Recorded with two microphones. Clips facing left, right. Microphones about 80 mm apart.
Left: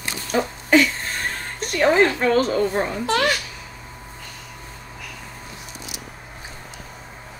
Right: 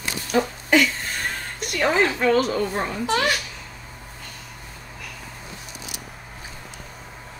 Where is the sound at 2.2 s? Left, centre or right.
Left.